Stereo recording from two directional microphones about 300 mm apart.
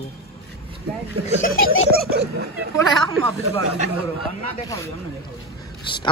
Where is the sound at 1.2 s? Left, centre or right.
Left.